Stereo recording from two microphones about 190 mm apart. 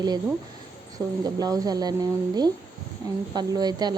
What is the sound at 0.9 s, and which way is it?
Speech, 20° right (ahead or behind).